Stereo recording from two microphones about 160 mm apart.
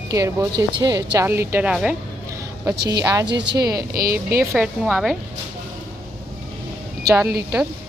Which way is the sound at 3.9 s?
65° right (ahead or behind).